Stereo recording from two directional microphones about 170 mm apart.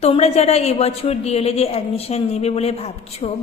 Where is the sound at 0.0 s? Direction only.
40° left (ahead or behind).